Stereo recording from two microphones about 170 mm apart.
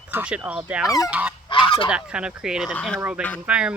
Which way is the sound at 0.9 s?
20° left (ahead or behind).